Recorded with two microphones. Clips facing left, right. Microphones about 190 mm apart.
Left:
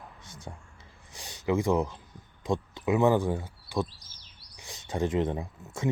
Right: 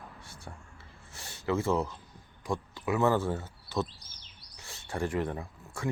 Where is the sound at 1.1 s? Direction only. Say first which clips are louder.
Left 3 dB; 15° left (ahead or behind).